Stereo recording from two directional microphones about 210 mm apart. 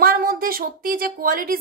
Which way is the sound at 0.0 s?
45° right (ahead or behind).